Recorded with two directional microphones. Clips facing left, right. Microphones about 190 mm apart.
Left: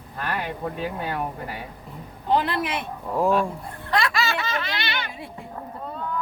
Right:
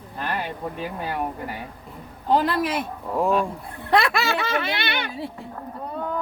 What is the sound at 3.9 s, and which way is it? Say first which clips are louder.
Speech: right 3 dB; 60° right (ahead or behind).